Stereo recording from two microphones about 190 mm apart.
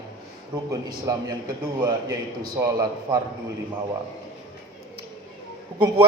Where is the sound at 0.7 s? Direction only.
20° right (ahead or behind).